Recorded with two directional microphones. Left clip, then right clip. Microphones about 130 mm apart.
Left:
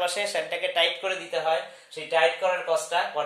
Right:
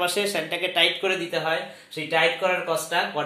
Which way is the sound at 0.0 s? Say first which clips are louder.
Right 2 dB; 40° left (ahead or behind).